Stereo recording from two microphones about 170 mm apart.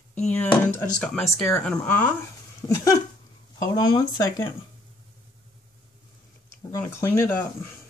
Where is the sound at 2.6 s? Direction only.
20° left (ahead or behind).